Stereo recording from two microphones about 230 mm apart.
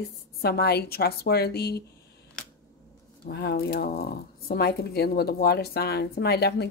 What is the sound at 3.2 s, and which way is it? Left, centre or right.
Speech, left.